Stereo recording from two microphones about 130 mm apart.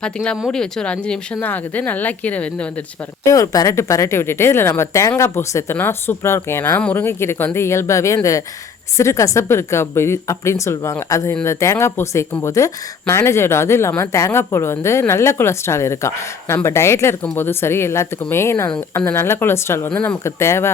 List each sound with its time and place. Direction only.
0.0 s speech: 5° left (ahead or behind)
3.2 s speech: 25° left (ahead or behind)